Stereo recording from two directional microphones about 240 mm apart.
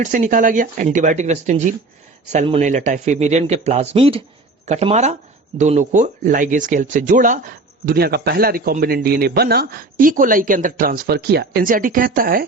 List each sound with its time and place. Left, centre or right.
0.0 s speech: right